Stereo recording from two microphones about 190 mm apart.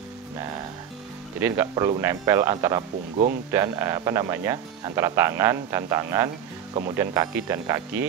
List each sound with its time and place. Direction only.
1.4 s speech: 15° right (ahead or behind)